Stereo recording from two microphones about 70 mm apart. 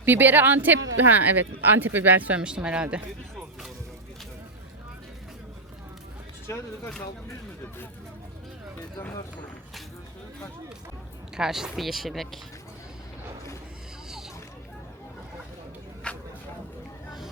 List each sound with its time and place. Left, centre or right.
0.0 s speech: right
6.5 s speech: left
11.3 s speech: centre
16.1 s a sound: centre